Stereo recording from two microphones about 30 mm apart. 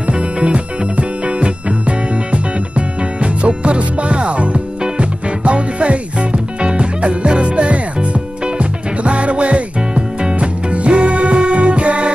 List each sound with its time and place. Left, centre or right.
0.0 s music: right